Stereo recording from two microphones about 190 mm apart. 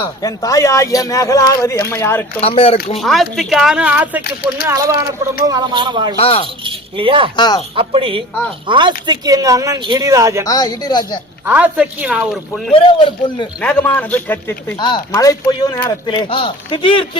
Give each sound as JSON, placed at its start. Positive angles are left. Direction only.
{"t": 0.0, "sound": "speech", "side_deg": 20}
{"t": 2.4, "sound": "speech", "side_deg": 30}
{"t": 3.0, "sound": "a woman's voice", "side_deg": 0}
{"t": 4.6, "sound": "speech", "side_deg": -20}
{"t": 6.1, "sound": "speech", "side_deg": 30}
{"t": 6.7, "sound": "speech", "side_deg": -25}
{"t": 7.3, "sound": "speech", "side_deg": 20}
{"t": 7.8, "sound": "speech", "side_deg": -30}
{"t": 10.4, "sound": "speech", "side_deg": 20}
{"t": 11.4, "sound": "speech", "side_deg": -10}
{"t": 12.7, "sound": "speech", "side_deg": 25}
{"t": 13.6, "sound": "speech", "side_deg": 5}
{"t": 14.8, "sound": "speech", "side_deg": 25}